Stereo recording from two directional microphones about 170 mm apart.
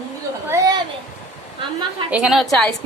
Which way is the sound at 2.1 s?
5° right (ahead or behind).